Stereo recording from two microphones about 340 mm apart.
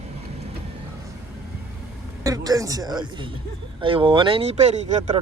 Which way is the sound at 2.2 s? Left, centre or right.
Centre.